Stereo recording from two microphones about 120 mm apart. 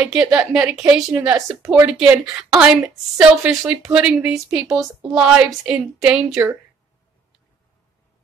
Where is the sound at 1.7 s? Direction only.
10° right (ahead or behind).